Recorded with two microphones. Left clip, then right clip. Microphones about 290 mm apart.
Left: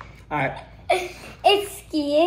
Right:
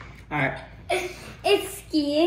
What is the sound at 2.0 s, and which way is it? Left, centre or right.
Speech, centre.